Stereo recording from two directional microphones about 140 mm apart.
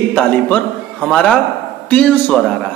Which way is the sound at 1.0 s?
5° left (ahead or behind).